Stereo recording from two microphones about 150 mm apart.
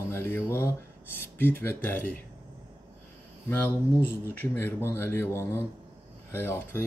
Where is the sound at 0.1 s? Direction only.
15° left (ahead or behind).